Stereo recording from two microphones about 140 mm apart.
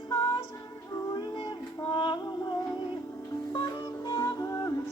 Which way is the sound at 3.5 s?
30° left (ahead or behind).